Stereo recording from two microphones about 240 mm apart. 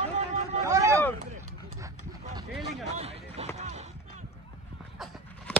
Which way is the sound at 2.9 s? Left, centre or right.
Right.